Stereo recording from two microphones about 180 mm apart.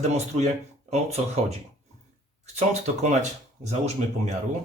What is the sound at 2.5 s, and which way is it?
A man's voice, 40° right (ahead or behind).